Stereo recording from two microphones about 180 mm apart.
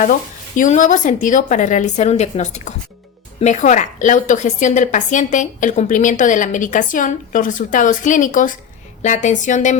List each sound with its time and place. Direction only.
0.0 s speech: 45° left (ahead or behind)